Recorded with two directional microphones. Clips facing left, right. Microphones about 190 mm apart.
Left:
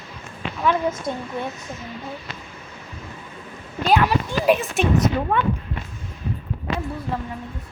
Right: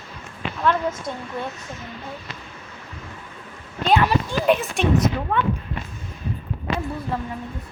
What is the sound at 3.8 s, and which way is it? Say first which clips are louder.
Speech: even; centre (ahead or behind).